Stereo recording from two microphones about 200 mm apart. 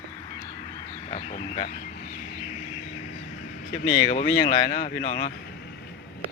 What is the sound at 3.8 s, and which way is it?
Speech, 25° left (ahead or behind).